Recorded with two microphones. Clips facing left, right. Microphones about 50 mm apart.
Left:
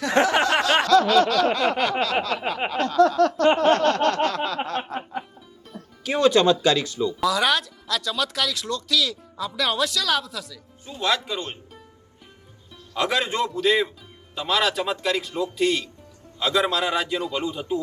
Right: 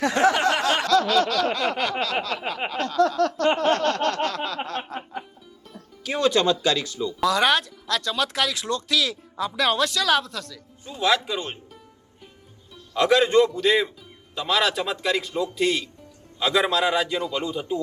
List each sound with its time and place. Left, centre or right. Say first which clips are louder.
0.1 s a sound: left 2 dB; left
0.9 s a sound: left 3 dB; left
4.4 s snicker: left 3 dB; left
4.8 s music: left 3 dB; left
6.0 s speech: left 3 dB; left
7.2 s speech: right 2 dB; centre
12.9 s speech: right 6 dB; centre